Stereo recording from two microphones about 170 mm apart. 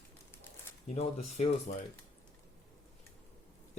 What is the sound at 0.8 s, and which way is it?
Speech, 40° left (ahead or behind).